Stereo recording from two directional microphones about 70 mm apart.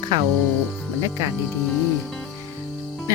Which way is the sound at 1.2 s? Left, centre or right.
Right.